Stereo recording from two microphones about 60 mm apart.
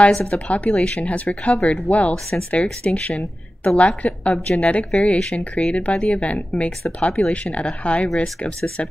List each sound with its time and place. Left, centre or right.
0.3 s speech: left